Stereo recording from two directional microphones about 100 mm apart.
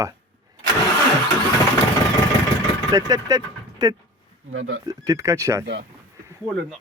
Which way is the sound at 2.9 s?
35° right (ahead or behind).